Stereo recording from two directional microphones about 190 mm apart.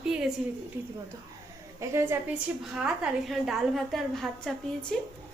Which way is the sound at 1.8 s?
15° right (ahead or behind).